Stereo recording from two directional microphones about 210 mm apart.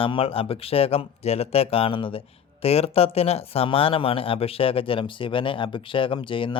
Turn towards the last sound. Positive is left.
turn(degrees=25)  # may be behind; listen again after turning